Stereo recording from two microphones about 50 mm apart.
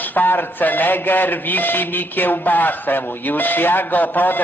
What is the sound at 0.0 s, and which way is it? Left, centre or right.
Speech, left.